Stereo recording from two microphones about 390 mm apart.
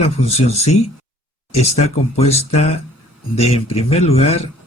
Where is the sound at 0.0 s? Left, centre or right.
Centre.